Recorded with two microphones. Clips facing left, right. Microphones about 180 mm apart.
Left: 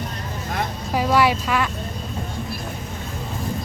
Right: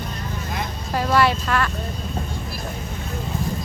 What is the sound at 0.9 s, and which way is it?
Speech, 10° left (ahead or behind).